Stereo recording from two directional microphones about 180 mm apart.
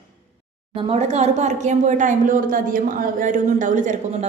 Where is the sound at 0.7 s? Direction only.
35° right (ahead or behind).